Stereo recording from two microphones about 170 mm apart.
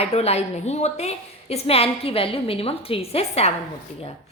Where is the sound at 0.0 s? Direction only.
40° left (ahead or behind).